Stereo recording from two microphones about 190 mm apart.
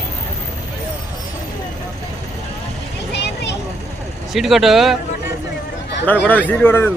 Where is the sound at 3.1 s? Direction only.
60° left (ahead or behind).